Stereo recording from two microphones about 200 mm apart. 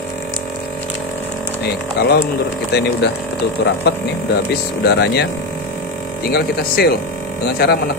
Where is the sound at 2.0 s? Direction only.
50° left (ahead or behind).